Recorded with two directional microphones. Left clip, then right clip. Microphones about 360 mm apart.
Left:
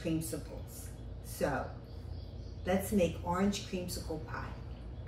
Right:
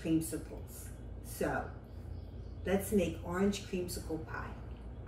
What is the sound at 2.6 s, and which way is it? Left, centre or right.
A woman's voice, centre.